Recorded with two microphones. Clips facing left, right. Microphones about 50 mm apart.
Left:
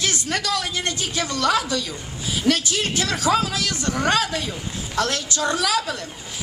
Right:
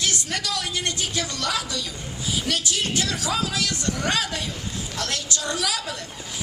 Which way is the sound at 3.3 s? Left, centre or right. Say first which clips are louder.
Left 9 dB; left.